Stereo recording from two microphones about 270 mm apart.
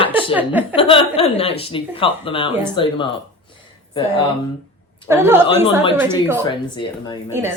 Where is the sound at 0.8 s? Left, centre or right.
Centre.